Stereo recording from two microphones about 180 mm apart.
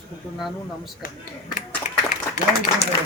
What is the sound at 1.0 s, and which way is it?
Speech, 55° left (ahead or behind).